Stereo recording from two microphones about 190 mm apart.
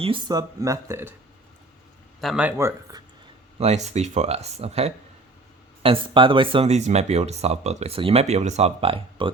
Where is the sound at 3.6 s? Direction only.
35° right (ahead or behind).